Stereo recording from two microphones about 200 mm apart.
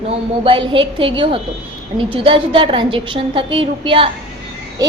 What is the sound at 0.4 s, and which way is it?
A woman's voice, 25° right (ahead or behind).